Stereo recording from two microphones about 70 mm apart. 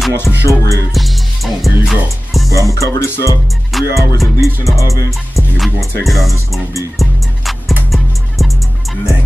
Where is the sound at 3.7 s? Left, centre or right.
Centre.